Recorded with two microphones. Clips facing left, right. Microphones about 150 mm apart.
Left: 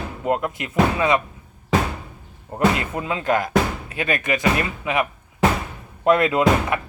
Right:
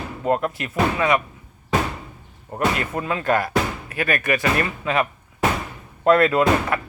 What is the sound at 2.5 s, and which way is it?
Speech, 20° left (ahead or behind).